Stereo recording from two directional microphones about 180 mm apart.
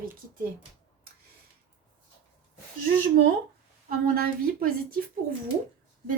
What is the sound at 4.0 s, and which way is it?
Speech, 55° right (ahead or behind).